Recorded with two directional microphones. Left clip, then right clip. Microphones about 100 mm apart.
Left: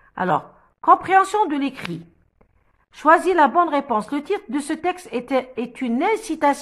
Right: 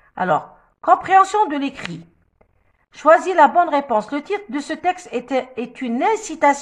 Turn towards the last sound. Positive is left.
turn(degrees=25)  # may be behind; listen again after turning